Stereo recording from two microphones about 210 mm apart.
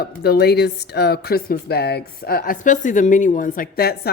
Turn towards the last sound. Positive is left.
turn(degrees=45)  # may be behind; listen again after turning